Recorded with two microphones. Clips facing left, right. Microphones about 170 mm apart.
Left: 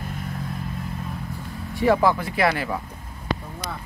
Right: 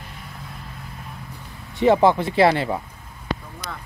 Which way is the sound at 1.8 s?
25° right (ahead or behind).